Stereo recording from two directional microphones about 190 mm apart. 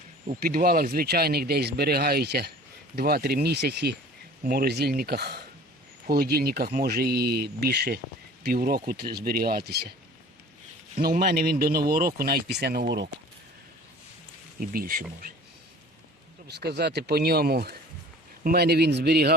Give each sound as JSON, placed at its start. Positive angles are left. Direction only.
{"t": 0.4, "sound": "speech", "side_deg": -50}
{"t": 10.9, "sound": "speech", "side_deg": -50}
{"t": 14.6, "sound": "speech", "side_deg": -50}
{"t": 16.6, "sound": "speech", "side_deg": -60}